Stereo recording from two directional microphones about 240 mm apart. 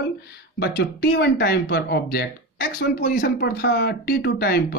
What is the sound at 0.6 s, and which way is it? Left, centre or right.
Speech, left.